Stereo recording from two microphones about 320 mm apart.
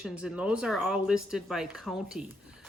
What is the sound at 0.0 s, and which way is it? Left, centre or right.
Speech, centre.